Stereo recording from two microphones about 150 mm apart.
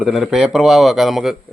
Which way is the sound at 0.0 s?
Centre (ahead or behind).